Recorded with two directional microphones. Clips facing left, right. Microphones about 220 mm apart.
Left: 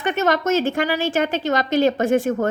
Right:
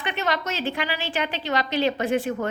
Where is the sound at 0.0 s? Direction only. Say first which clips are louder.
Left 7 dB; 45° left (ahead or behind).